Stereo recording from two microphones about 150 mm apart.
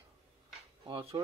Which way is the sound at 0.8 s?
35° right (ahead or behind).